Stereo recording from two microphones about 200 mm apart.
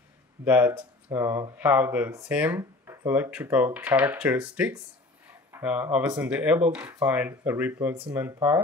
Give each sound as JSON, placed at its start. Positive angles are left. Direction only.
{"t": 0.5, "sound": "speech", "side_deg": -10}